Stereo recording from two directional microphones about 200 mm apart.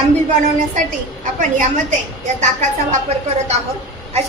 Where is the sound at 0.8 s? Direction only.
40° right (ahead or behind).